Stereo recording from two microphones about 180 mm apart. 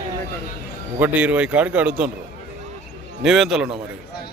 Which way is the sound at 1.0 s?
10° right (ahead or behind).